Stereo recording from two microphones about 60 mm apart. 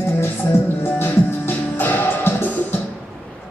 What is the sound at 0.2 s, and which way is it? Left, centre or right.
Music, left.